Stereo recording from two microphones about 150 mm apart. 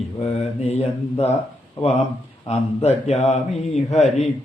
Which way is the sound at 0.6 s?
45° left (ahead or behind).